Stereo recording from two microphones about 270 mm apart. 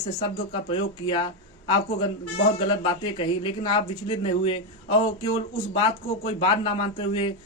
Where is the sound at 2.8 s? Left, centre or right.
Centre.